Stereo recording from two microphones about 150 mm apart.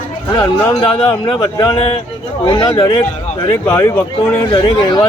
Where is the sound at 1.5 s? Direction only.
25° left (ahead or behind).